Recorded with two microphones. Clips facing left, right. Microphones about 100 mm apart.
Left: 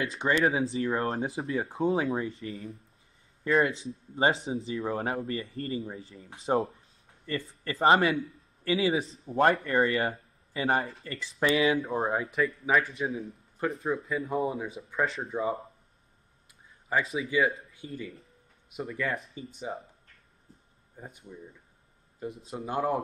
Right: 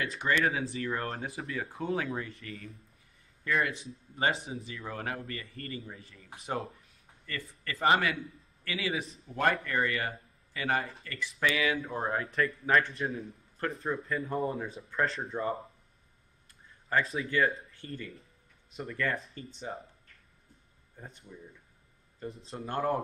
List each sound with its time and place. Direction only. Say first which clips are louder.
0.0 s speech: left 3 dB; 25° left (ahead or behind)
12.2 s speech: left 2 dB; 5° left (ahead or behind)
16.9 s speech: left 2 dB; centre (ahead or behind)
20.9 s speech: left 3 dB; 10° left (ahead or behind)
22.5 s speech: left 2 dB; 10° left (ahead or behind)